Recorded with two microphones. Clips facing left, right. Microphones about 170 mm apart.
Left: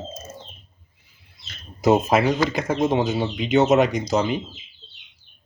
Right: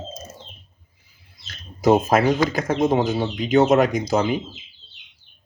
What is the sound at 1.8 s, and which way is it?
Speech, centre (ahead or behind).